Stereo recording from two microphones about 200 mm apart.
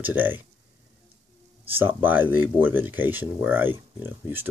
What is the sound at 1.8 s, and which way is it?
Speech, 10° right (ahead or behind).